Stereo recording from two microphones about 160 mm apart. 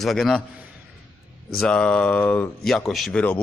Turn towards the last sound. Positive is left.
turn(degrees=10)  # may be behind; listen again after turning